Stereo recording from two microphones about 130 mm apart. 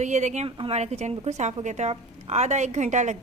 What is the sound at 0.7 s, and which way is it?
A woman's voice, 60° right (ahead or behind).